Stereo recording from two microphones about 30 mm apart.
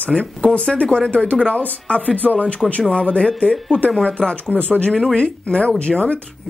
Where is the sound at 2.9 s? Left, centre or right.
Left.